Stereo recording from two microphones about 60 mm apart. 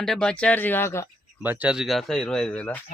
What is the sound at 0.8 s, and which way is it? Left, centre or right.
Speech, left.